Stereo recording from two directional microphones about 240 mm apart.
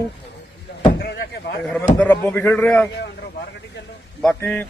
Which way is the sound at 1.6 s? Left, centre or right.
Centre.